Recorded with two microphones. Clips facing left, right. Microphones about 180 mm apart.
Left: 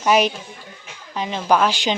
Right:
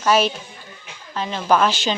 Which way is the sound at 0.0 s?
15° left (ahead or behind).